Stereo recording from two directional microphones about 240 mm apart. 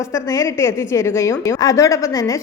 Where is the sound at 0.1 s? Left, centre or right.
Centre.